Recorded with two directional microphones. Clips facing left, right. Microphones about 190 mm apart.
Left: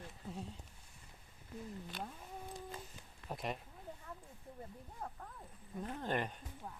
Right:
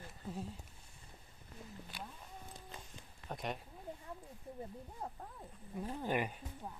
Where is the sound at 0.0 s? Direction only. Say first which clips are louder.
Right 2 dB; centre (ahead or behind).